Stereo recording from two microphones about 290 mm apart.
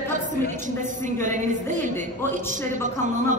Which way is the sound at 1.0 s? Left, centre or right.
Right.